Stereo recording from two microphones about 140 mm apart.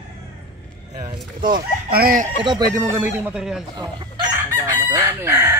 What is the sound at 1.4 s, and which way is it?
Speech, 85° right.